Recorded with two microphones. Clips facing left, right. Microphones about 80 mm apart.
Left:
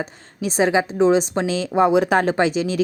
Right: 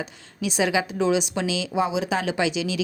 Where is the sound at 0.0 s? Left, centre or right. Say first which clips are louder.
Left 3 dB; left.